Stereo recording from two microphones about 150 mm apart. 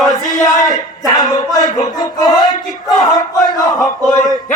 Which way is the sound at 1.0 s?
25° left (ahead or behind).